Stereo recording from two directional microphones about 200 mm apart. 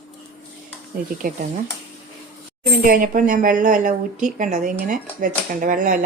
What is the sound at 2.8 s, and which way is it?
Speech, 45° right (ahead or behind).